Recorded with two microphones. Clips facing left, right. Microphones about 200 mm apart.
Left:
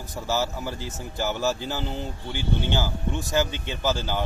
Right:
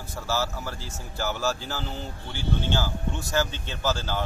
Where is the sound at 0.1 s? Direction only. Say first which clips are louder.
Left 2 dB; 15° left (ahead or behind).